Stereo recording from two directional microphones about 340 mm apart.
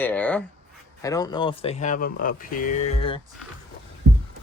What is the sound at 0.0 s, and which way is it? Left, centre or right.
Speech, centre.